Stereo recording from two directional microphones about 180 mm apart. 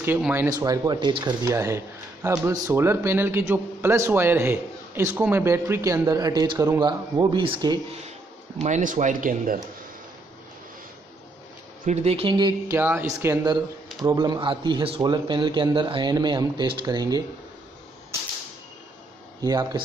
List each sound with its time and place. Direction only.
0.0 s a man's voice: 10° right (ahead or behind); by 8.0 s 25° right (ahead or behind)
8.5 s speech: 40° right (ahead or behind)
11.8 s speech: 35° right (ahead or behind)
12.7 s a man's voice: 10° right (ahead or behind)
19.4 s a man's voice: 20° right (ahead or behind)